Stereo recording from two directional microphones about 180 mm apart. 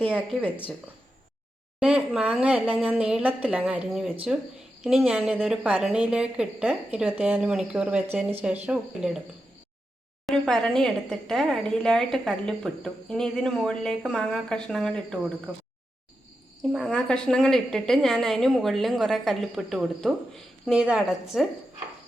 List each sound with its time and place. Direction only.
0.1 s a woman's voice: 5° right (ahead or behind)
1.8 s a woman's voice: 5° right (ahead or behind)
10.2 s a woman's voice: 5° left (ahead or behind)
16.7 s a woman's voice: 5° left (ahead or behind)